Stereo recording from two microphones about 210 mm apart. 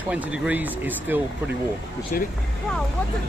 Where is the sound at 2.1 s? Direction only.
40° left (ahead or behind).